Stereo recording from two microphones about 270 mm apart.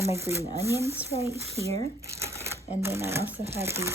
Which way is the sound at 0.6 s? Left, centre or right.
Centre.